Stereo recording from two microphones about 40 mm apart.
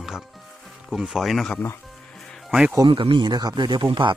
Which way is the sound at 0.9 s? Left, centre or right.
Centre.